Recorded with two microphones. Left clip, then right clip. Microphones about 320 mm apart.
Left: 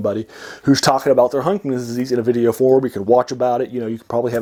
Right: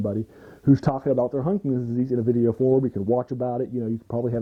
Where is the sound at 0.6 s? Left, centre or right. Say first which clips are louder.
Left 8 dB; centre.